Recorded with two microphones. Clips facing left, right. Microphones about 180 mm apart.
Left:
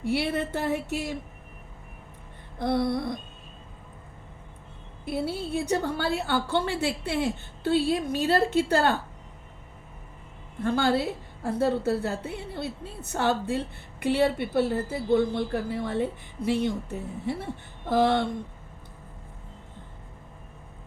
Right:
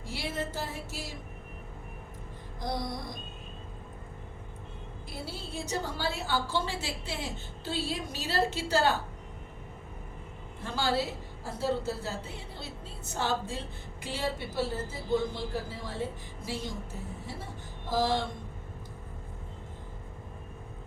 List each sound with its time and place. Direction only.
0.0 s a woman's voice: 60° left (ahead or behind)
2.6 s a woman's voice: 60° left (ahead or behind)
5.0 s a woman's voice: 60° left (ahead or behind)
10.6 s a woman's voice: 55° left (ahead or behind)